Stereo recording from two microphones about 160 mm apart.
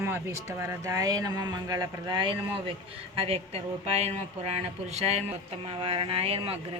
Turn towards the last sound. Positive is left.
turn(degrees=-35)  # may be behind; listen again after turning